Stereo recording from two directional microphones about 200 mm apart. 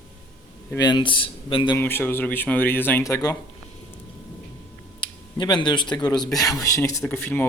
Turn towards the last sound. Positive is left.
turn(degrees=10)  # may be behind; listen again after turning